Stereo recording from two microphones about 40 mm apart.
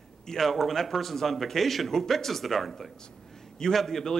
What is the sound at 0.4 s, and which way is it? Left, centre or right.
A man's voice, centre.